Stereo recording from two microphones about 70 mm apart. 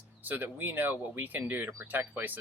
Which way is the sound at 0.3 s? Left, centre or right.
Right.